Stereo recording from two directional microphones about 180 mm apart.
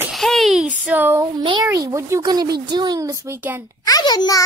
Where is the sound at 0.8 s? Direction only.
10° right (ahead or behind).